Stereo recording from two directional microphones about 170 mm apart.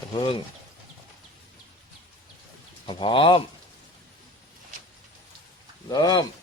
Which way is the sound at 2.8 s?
30° left (ahead or behind).